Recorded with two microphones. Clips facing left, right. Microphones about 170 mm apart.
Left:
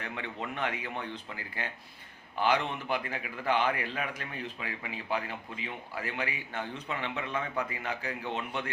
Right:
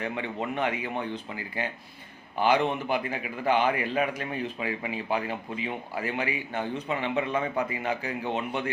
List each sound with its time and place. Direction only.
0.5 s a man's voice: 15° right (ahead or behind)